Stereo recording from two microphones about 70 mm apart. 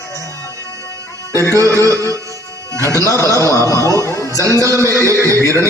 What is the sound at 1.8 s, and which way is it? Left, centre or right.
Music, right.